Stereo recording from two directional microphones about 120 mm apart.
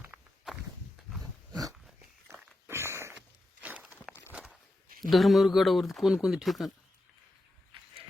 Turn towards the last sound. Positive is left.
turn(degrees=0)  # may be behind; listen again after turning